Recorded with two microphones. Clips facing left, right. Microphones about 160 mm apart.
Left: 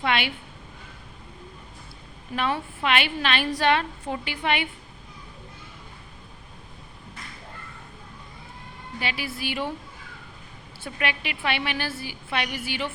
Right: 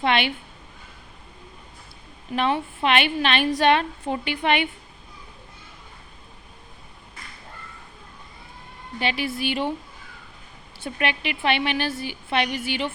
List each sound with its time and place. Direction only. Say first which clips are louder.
0.0 s a woman's voice: right 3 dB; 25° right (ahead or behind)
2.3 s a woman's voice: right 4 dB; 20° right (ahead or behind)
9.0 s a woman's voice: right 6 dB; 25° right (ahead or behind)
10.8 s a woman's voice: right 3 dB; 25° right (ahead or behind)